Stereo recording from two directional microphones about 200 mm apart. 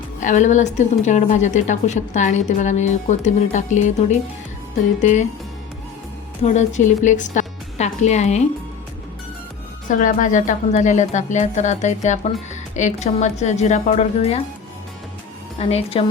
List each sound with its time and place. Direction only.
0.2 s a woman's voice: 40° left (ahead or behind)
6.4 s a woman's voice: 35° left (ahead or behind)
9.9 s a woman's voice: 40° left (ahead or behind)
15.5 s speech: 30° left (ahead or behind)